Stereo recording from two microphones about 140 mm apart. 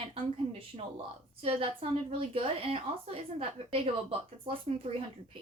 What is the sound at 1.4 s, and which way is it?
A woman's voice, 40° right (ahead or behind).